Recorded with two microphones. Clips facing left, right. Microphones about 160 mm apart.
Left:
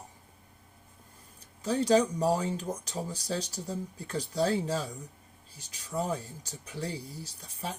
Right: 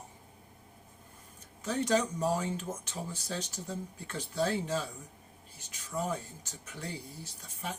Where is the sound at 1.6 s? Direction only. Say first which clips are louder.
Left 5 dB; 35° left (ahead or behind).